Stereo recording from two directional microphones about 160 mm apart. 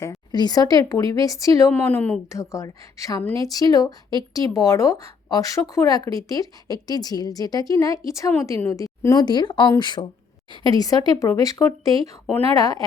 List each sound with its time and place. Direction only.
0.0 s speech: 25° left (ahead or behind)